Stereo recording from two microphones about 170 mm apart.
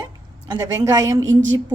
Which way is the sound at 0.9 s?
20° right (ahead or behind).